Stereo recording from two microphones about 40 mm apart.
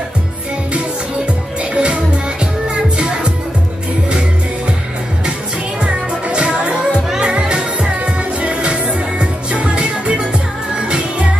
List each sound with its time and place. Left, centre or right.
1.6 s music: right
5.8 s music: right